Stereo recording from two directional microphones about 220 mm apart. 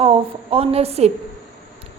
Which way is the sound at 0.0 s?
25° right (ahead or behind).